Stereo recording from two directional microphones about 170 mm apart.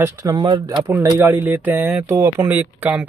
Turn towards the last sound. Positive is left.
turn(degrees=-10)  # may be behind; listen again after turning